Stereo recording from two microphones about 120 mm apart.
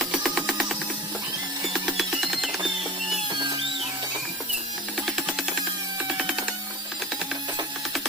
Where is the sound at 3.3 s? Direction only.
35° right (ahead or behind).